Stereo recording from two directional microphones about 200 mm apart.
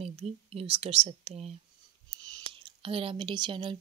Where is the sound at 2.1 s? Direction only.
20° right (ahead or behind).